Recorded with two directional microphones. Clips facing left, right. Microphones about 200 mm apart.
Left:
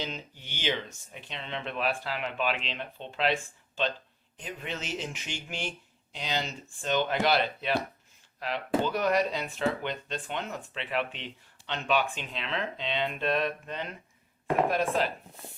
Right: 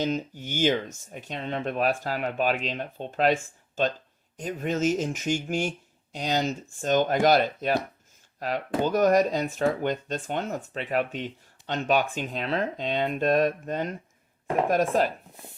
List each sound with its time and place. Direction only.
0.0 s speech: 45° right (ahead or behind)